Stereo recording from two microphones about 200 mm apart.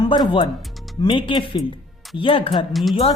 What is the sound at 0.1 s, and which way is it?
A woman's voice, 25° left (ahead or behind).